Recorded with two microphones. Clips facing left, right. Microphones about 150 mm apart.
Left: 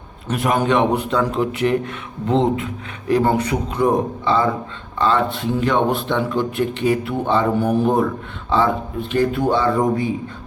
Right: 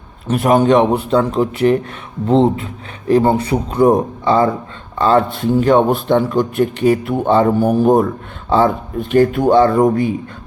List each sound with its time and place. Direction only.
0.3 s speech: 35° right (ahead or behind)